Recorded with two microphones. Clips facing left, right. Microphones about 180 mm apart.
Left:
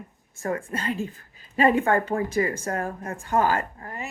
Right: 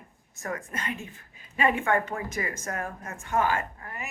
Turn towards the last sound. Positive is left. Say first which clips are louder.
# left 3 dB
turn(degrees=35)  # may be behind; listen again after turning